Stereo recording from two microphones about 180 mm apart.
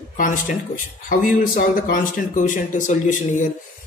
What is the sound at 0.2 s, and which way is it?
Speech, 45° left (ahead or behind).